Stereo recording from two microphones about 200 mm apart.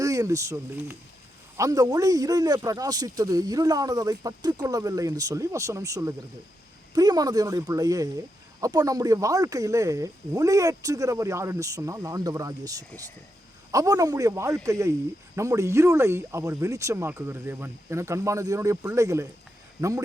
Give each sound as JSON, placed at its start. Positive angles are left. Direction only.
{"t": 0.0, "sound": "a man's voice", "side_deg": -15}